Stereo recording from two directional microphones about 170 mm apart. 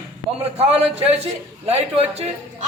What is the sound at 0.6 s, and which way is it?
A man's voice, 35° right (ahead or behind).